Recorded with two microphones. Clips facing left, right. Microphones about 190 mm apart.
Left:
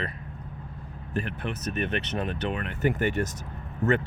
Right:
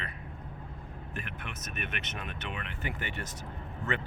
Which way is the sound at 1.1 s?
35° left (ahead or behind).